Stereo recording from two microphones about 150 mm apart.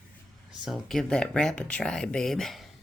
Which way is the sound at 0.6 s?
Centre (ahead or behind).